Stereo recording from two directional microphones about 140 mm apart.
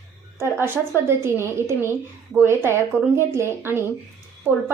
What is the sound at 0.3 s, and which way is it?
A woman's voice, 15° right (ahead or behind).